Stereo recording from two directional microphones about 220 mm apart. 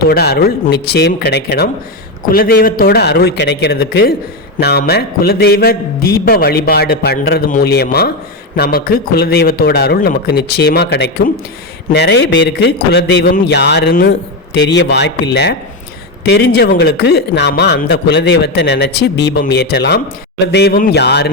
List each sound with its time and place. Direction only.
0.1 s speech: 45° left (ahead or behind)